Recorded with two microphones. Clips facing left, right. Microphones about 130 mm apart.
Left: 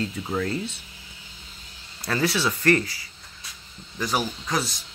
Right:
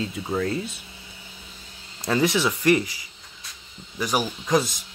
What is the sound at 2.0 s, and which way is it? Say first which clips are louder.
Speech: right 3 dB; 20° right (ahead or behind).